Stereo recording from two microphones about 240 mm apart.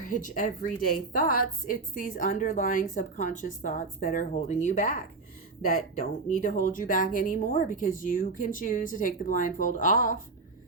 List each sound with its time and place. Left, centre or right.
0.0 s a woman's voice: left
6.4 s a woman's voice: left